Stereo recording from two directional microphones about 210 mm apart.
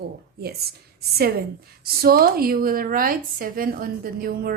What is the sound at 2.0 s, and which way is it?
A woman's voice, 45° right (ahead or behind).